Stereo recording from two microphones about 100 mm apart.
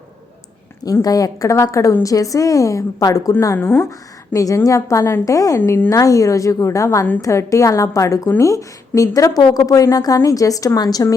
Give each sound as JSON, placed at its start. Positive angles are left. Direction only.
{"t": 1.0, "sound": "a woman's voice", "side_deg": 40}